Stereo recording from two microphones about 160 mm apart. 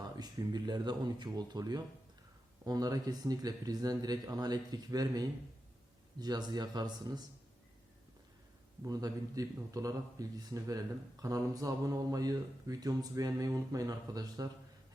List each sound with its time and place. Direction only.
0.0 s a man's voice: 25° right (ahead or behind)
8.8 s a man's voice: 20° right (ahead or behind)